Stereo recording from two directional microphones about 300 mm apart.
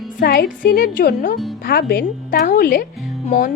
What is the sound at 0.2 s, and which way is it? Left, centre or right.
Speech, left.